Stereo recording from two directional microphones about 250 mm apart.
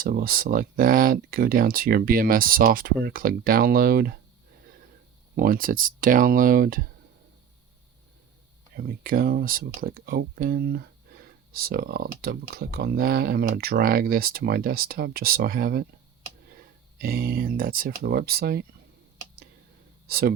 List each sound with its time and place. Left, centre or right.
0.0 s speech: right
5.4 s speech: right
8.7 s speech: right
20.1 s speech: right